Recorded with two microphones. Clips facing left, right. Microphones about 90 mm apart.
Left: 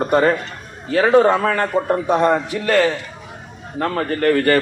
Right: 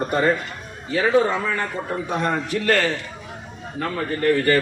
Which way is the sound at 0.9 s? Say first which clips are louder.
Left 5 dB; 70° left (ahead or behind).